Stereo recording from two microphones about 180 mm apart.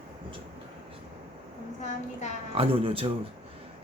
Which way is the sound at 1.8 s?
40° left (ahead or behind).